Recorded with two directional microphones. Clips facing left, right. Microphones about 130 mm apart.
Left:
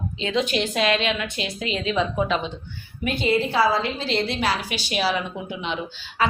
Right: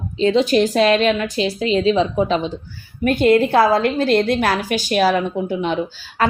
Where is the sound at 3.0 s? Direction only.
50° right (ahead or behind).